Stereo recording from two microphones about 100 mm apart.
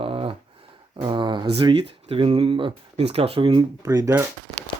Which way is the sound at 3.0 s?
80° right.